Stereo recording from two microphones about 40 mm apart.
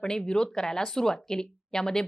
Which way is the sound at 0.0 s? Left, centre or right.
Centre.